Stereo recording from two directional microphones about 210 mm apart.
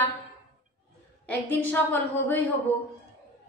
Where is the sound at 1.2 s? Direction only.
10° left (ahead or behind).